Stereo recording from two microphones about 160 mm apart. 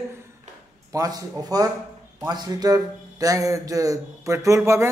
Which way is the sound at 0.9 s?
20° right (ahead or behind).